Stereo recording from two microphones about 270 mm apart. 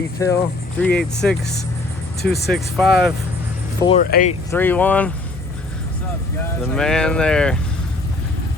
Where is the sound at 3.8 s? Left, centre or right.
Centre.